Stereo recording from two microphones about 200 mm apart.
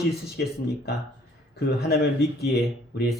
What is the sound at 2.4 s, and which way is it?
Speech, 50° left (ahead or behind).